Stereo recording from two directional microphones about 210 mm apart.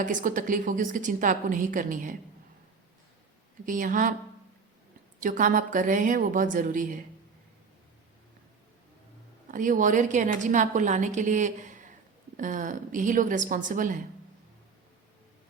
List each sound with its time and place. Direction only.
0.0 s a woman's voice: 40° right (ahead or behind)
3.7 s a woman's voice: 40° right (ahead or behind)
5.2 s a woman's voice: 40° right (ahead or behind)
9.5 s a woman's voice: 40° right (ahead or behind)